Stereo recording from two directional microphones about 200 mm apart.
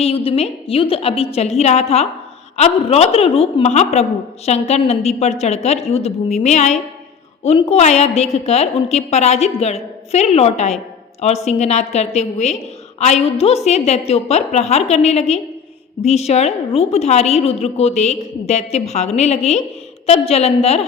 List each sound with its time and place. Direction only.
0.3 s a woman's voice: 30° left (ahead or behind)